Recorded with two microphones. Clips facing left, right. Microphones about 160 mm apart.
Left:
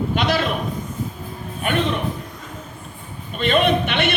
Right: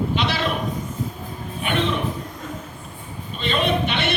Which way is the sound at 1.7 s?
45° left (ahead or behind).